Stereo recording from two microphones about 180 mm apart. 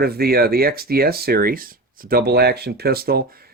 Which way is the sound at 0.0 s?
60° right (ahead or behind).